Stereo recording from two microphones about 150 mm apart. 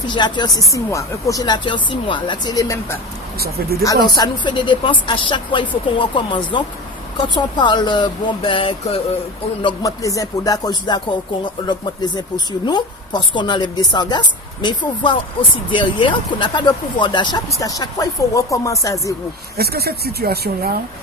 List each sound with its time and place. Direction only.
0.1 s a woman's voice: 30° left (ahead or behind)
3.4 s speech: 90° right
3.8 s a woman's voice: 30° left (ahead or behind)
9.6 s a woman's voice: 20° left (ahead or behind)
19.5 s speech: 90° right